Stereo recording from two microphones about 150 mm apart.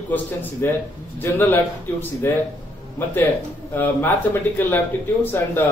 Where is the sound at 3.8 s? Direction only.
10° left (ahead or behind).